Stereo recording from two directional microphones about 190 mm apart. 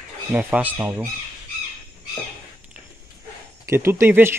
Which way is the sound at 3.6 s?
15° right (ahead or behind).